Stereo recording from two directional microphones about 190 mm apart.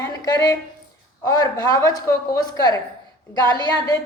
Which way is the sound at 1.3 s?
20° left (ahead or behind).